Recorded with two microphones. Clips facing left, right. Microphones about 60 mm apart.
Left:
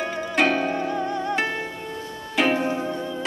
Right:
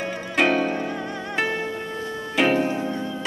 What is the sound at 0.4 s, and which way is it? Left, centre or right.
Music, centre.